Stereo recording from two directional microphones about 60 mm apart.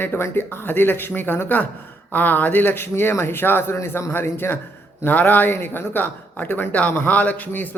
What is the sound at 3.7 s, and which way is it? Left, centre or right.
Speech, left.